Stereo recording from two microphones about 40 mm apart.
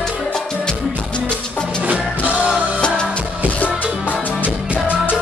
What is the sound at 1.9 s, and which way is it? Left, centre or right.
Music, right.